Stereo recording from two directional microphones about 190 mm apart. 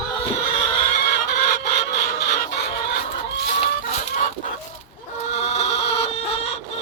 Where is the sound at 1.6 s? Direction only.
60° left (ahead or behind).